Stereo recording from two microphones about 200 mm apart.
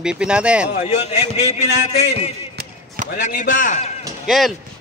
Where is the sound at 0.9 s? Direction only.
30° left (ahead or behind).